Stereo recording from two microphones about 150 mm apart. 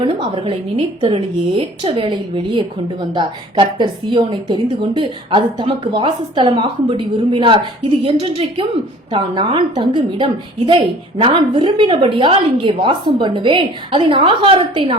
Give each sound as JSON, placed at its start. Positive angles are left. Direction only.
{"t": 0.0, "sound": "a woman's voice", "side_deg": -35}